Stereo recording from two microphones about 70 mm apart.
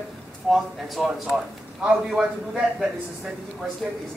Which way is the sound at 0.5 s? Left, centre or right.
Centre.